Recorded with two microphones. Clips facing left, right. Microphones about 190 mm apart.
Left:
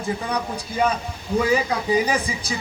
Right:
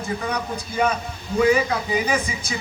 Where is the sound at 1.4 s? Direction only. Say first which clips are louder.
Right 4 dB; 35° left (ahead or behind).